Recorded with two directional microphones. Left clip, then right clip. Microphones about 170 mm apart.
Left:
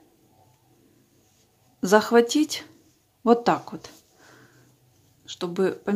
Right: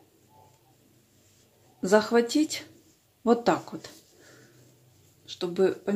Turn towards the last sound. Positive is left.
turn(degrees=25)  # may be behind; listen again after turning